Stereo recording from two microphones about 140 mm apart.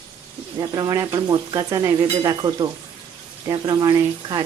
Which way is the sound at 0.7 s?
25° right (ahead or behind).